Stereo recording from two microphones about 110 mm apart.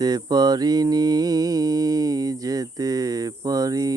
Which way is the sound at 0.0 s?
35° right (ahead or behind).